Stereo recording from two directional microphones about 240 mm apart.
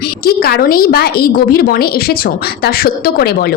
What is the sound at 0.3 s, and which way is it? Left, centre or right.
A woman's voice, left.